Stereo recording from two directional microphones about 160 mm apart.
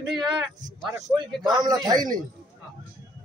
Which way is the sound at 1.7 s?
25° right (ahead or behind).